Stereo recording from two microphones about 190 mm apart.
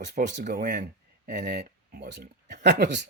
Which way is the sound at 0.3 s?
45° right (ahead or behind).